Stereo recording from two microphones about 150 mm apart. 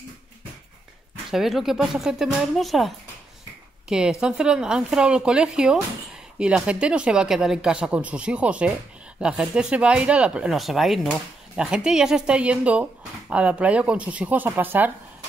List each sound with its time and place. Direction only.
1.3 s speech: centre (ahead or behind)
3.9 s speech: 5° right (ahead or behind)